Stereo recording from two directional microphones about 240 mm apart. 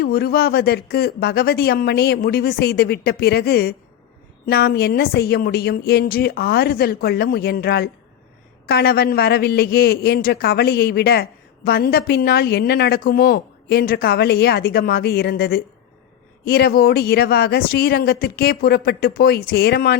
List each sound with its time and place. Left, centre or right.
0.0 s a man's voice: left